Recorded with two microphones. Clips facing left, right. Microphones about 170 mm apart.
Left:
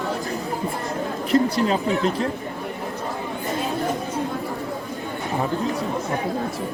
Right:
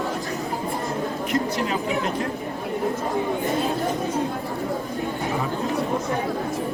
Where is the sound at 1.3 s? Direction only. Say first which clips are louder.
Left 7 dB; 35° left (ahead or behind).